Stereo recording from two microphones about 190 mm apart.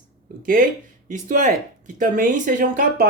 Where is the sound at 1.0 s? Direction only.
45° right (ahead or behind).